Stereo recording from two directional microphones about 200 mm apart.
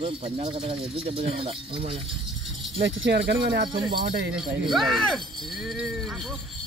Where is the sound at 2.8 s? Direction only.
60° right (ahead or behind).